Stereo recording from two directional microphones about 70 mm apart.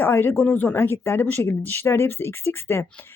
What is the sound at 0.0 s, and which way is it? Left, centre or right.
Speech, left.